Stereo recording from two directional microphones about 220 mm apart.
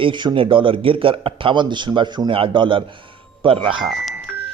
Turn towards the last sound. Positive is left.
turn(degrees=0)  # may be behind; listen again after turning